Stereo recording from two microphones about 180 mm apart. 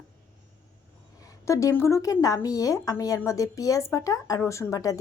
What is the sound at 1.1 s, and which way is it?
A woman's voice, 20° left (ahead or behind).